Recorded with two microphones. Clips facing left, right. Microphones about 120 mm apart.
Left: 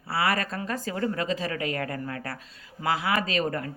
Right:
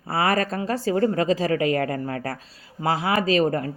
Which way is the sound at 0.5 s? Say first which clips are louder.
Right 8 dB; 30° right (ahead or behind).